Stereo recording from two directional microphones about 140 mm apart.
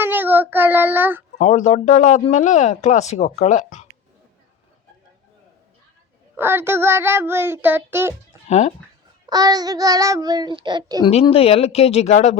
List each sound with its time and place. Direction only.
0.0 s child singing: 15° right (ahead or behind)
1.4 s speech: 55° left (ahead or behind)
6.3 s child singing: 15° right (ahead or behind)
8.4 s speech: 55° left (ahead or behind)
9.2 s child singing: 25° right (ahead or behind)
11.0 s speech: 45° left (ahead or behind)